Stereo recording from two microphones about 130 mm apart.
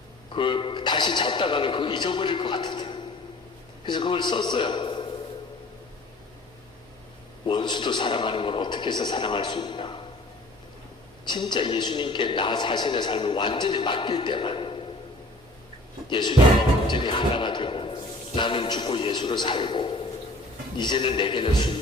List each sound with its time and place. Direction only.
0.3 s a man's voice: 40° left (ahead or behind)
7.4 s a man's voice: 35° left (ahead or behind)
11.3 s a man's voice: 35° left (ahead or behind)
16.0 s speech: 35° left (ahead or behind)
16.8 s a sound: 35° left (ahead or behind)
18.3 s a man's voice: 40° left (ahead or behind)